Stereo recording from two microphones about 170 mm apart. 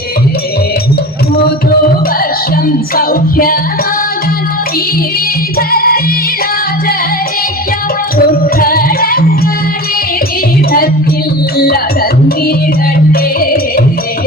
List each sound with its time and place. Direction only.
2.9 s music: 60° left (ahead or behind)
5.5 s music: 60° left (ahead or behind)
8.2 s music: 60° left (ahead or behind)
11.5 s music: 65° left (ahead or behind)
13.4 s music: 60° left (ahead or behind)